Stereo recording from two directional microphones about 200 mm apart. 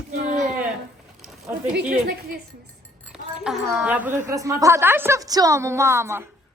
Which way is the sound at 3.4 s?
5° right (ahead or behind).